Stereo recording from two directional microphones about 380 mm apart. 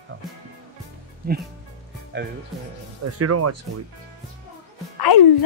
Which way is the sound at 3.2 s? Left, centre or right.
Right.